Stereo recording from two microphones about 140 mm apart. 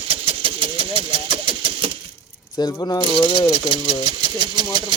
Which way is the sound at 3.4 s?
35° right (ahead or behind).